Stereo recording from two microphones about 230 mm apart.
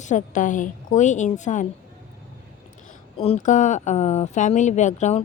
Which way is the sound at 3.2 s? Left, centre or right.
Left.